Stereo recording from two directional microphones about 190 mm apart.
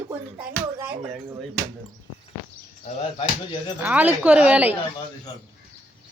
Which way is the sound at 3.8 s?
10° right (ahead or behind).